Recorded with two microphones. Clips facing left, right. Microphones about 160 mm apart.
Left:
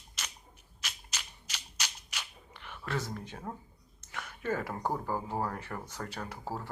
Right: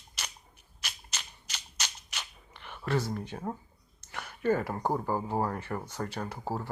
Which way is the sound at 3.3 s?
20° right (ahead or behind).